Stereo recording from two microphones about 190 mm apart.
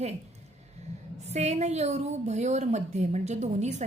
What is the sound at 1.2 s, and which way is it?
A woman's voice, 35° right (ahead or behind).